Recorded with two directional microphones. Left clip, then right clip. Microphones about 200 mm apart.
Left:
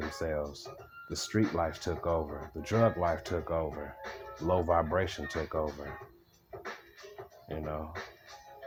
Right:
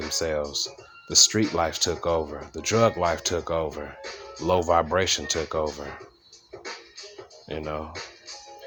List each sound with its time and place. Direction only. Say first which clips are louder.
0.1 s speech: right 8 dB; 20° right (ahead or behind)
7.4 s speech: right 7 dB; 25° right (ahead or behind)